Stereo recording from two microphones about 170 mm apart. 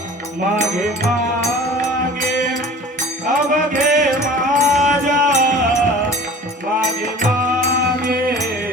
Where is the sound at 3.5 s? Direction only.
45° right (ahead or behind).